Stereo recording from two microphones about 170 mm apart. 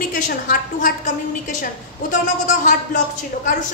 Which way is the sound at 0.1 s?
55° left (ahead or behind).